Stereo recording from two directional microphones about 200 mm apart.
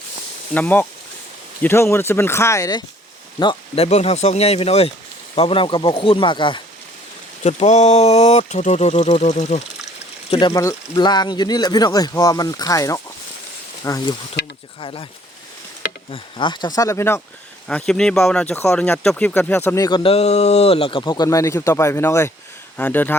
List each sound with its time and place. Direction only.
0.5 s speech: 10° left (ahead or behind); by 6.6 s 25° left (ahead or behind)
7.4 s speech: 35° left (ahead or behind)
10.5 s speech: 15° left (ahead or behind)
14.4 s speech: 60° left (ahead or behind)
14.8 s speech: 25° left (ahead or behind)
16.1 s speech: 25° left (ahead or behind)